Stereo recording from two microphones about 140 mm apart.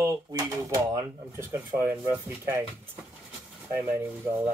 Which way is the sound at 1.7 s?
15° right (ahead or behind).